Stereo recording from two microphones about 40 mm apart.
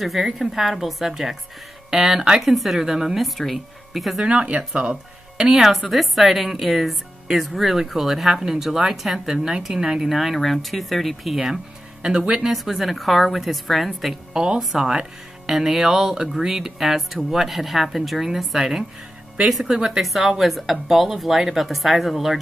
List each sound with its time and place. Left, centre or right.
0.0 s a woman's voice: centre
1.9 s speech: centre
2.4 s a woman's voice: centre
2.8 s speech: centre
3.2 s a woman's voice: centre
4.3 s speech: right
5.6 s a woman's voice: centre
10.0 s a woman's voice: centre
11.3 s speech: centre
12.0 s speech: right
12.4 s a woman's voice: centre
14.3 s speech: centre
14.6 s a woman's voice: centre
14.9 s a woman's voice: centre